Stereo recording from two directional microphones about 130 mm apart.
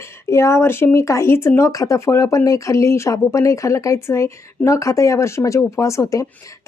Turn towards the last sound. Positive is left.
turn(degrees=25)  # may be behind; listen again after turning